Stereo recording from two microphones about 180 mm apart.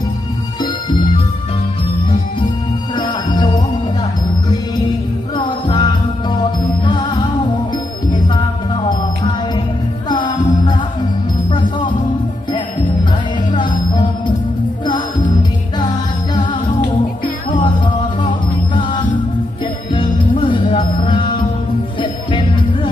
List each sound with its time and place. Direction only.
0.6 s music: 25° left (ahead or behind)
2.9 s music: 25° left (ahead or behind)
5.3 s music: 25° left (ahead or behind)
13.6 s music: 25° left (ahead or behind)
16.3 s music: 25° left (ahead or behind)
19.9 s music: 30° left (ahead or behind)